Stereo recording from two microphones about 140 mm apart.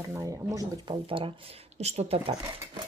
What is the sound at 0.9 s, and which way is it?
Speech, 40° right (ahead or behind).